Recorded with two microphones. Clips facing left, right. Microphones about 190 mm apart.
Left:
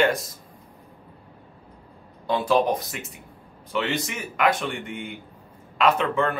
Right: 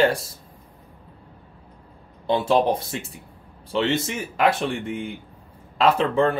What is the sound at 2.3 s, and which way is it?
Speech, 25° right (ahead or behind).